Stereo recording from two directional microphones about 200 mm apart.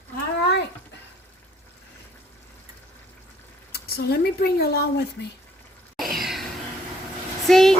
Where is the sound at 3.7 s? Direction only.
50° left (ahead or behind).